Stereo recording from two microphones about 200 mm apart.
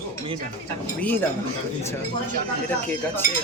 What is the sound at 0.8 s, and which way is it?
Speech, 10° left (ahead or behind).